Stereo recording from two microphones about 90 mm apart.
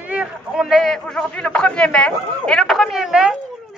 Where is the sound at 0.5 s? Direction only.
Centre (ahead or behind).